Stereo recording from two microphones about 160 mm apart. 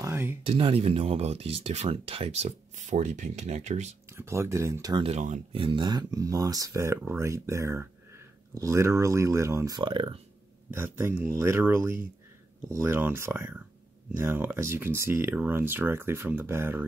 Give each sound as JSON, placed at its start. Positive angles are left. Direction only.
{"t": 0.0, "sound": "a sound", "side_deg": -15}
{"t": 0.5, "sound": "speech", "side_deg": -35}
{"t": 4.2, "sound": "speech", "side_deg": -15}
{"t": 5.0, "sound": "speech", "side_deg": -45}
{"t": 5.6, "sound": "speech", "side_deg": -30}
{"t": 10.7, "sound": "speech", "side_deg": -15}